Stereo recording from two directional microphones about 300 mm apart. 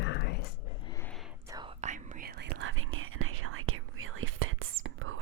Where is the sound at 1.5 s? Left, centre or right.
Centre; by 2.5 s right.